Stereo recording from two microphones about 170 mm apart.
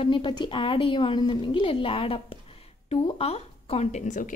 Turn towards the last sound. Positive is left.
turn(degrees=50)  # may be behind; listen again after turning